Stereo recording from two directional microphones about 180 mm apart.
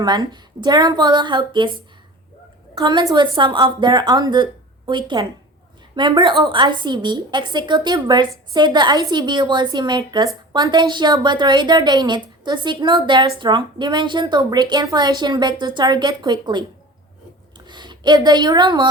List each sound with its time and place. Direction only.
0.0 s a woman's voice: 25° right (ahead or behind)
2.7 s a woman's voice: 25° right (ahead or behind)
17.7 s a woman's voice: 25° right (ahead or behind)